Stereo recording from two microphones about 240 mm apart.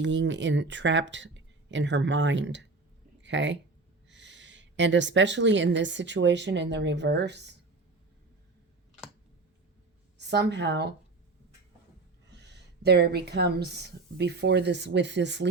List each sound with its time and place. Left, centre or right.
0.0 s speech: right
3.2 s a sound: right
4.1 s a woman's voice: right
10.2 s a woman's voice: right
12.3 s a woman's voice: right